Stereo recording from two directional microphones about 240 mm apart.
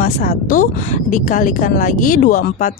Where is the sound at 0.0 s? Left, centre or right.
Left.